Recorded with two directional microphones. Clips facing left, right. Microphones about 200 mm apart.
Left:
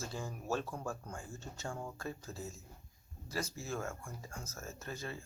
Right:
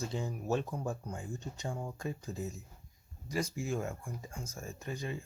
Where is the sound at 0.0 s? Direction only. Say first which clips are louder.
Right 5 dB; 20° right (ahead or behind).